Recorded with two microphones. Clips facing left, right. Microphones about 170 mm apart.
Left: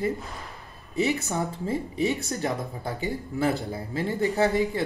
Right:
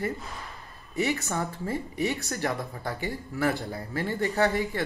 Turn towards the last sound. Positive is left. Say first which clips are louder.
# left 2 dB
turn(degrees=20)  # may be behind; listen again after turning